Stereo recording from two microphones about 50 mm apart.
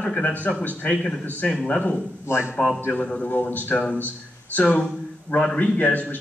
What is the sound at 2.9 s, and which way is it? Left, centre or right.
A man's voice, left.